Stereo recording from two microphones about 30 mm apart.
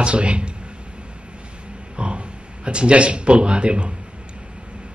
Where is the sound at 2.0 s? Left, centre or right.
Right.